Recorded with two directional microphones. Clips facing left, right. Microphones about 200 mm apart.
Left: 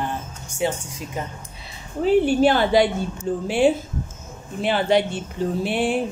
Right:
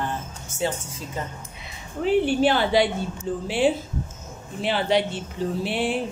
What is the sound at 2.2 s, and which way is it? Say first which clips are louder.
Speech: left 3 dB; 45° left (ahead or behind).